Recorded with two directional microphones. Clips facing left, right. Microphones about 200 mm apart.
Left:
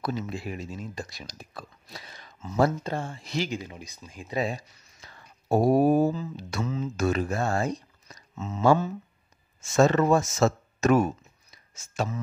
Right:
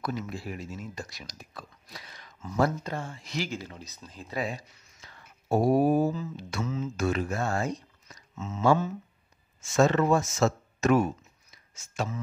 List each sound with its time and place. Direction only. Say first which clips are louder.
0.0 s speech: left 2 dB; 25° left (ahead or behind)
3.4 s speech: left 3 dB; 15° left (ahead or behind)
4.4 s speech: left 4 dB; 35° left (ahead or behind)
11.5 s a sound: left 3 dB; 35° left (ahead or behind)